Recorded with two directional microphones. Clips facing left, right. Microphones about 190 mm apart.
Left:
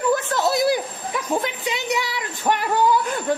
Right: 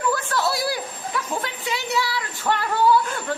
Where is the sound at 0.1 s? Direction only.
20° left (ahead or behind).